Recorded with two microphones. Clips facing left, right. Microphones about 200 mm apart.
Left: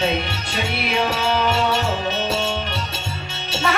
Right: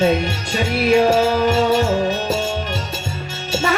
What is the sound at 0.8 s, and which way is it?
Music, 45° right (ahead or behind).